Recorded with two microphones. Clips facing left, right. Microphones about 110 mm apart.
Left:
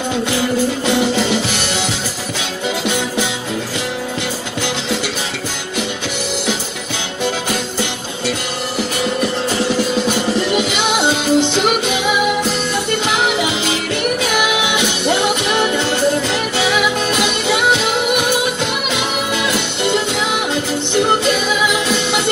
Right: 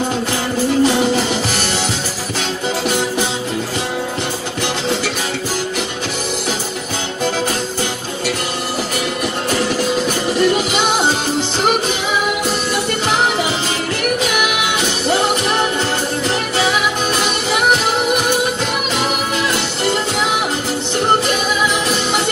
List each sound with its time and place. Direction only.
10.7 s music: 40° right (ahead or behind)
16.3 s music: 35° right (ahead or behind)
18.9 s music: 40° right (ahead or behind)